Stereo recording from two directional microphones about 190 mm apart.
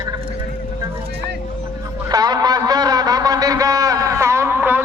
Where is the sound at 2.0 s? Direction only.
20° right (ahead or behind).